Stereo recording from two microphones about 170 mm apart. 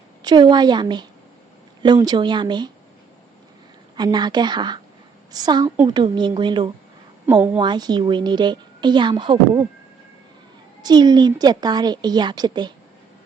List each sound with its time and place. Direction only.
0.2 s a woman's voice: 25° right (ahead or behind)
3.9 s a woman's voice: 25° right (ahead or behind)
10.8 s a woman's voice: 25° right (ahead or behind)